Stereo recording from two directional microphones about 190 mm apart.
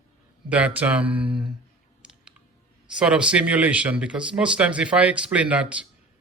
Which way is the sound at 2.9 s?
5° right (ahead or behind).